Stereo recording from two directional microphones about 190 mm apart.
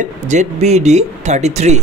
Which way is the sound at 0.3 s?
35° right (ahead or behind).